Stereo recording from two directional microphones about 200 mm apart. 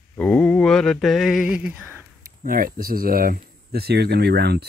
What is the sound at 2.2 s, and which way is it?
Speech, 45° right (ahead or behind).